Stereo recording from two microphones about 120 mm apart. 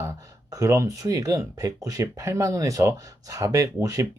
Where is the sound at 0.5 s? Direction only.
25° right (ahead or behind).